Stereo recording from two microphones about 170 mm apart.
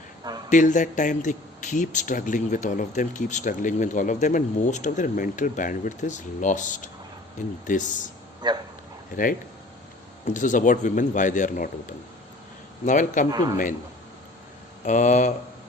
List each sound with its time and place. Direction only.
0.5 s speech: 50° left (ahead or behind)
8.4 s speech: 25° right (ahead or behind)
9.1 s speech: 50° left (ahead or behind)
12.8 s speech: 50° left (ahead or behind)
13.3 s speech: 20° right (ahead or behind)
14.8 s speech: 45° left (ahead or behind)